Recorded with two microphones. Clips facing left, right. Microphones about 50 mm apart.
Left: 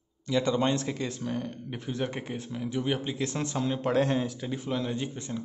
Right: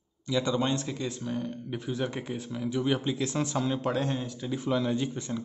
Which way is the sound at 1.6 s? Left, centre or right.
Left.